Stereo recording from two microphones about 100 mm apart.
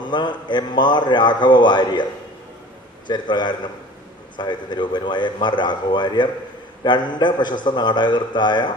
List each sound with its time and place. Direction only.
0.0 s a man's voice: 50° left (ahead or behind)
3.1 s a man's voice: 50° left (ahead or behind)